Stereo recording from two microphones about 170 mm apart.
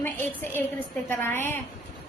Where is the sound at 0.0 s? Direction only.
10° left (ahead or behind).